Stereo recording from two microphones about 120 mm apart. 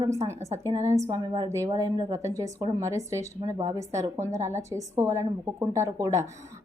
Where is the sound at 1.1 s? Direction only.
40° right (ahead or behind).